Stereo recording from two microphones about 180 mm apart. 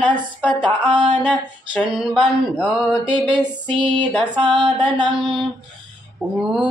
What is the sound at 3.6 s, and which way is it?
Music, 25° right (ahead or behind).